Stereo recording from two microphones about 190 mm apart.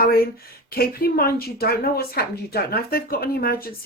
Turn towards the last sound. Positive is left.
turn(degrees=50)  # may be behind; listen again after turning